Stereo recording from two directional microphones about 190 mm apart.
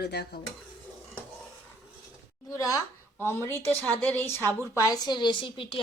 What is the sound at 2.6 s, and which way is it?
A woman's voice, 20° left (ahead or behind).